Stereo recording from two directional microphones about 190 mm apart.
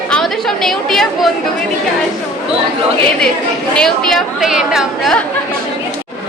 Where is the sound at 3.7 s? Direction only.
5° left (ahead or behind).